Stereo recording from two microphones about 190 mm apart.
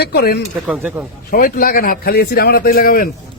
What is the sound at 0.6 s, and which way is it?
Speech, 5° right (ahead or behind).